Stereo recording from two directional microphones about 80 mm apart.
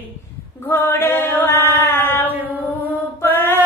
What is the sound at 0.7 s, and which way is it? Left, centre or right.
Male singing, left.